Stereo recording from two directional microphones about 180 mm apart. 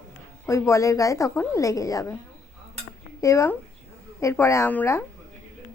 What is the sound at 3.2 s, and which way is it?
A woman's voice, 15° left (ahead or behind).